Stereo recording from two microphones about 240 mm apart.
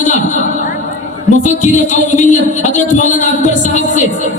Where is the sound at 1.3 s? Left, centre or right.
Left.